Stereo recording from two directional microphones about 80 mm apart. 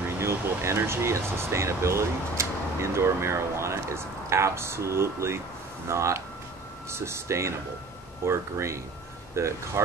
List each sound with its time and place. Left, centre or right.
0.2 s speech: right